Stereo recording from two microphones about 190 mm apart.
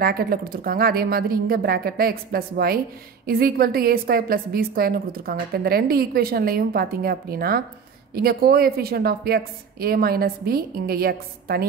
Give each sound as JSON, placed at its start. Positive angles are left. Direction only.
{"t": 0.0, "sound": "a woman's voice", "side_deg": -50}